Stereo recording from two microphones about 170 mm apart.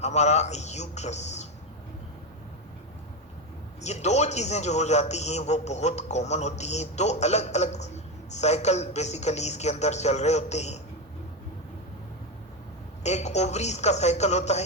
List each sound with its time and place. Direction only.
0.0 s a man's voice: 40° left (ahead or behind)
3.8 s a man's voice: 40° left (ahead or behind)
13.0 s a man's voice: 40° left (ahead or behind)